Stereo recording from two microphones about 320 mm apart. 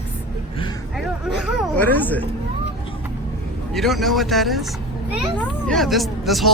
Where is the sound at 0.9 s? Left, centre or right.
Centre.